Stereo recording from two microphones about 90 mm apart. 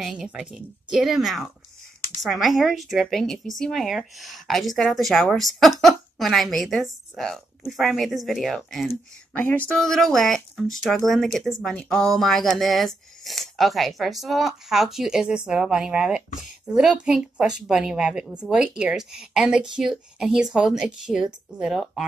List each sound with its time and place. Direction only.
0.0 s speech: centre (ahead or behind)
9.3 s speech: 20° left (ahead or behind)
9.8 s speech: 5° left (ahead or behind)